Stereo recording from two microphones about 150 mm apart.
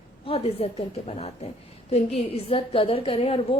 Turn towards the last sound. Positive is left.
turn(degrees=40)  # may be behind; listen again after turning